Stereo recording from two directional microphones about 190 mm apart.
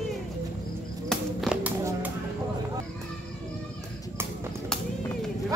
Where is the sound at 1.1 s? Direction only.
Centre (ahead or behind).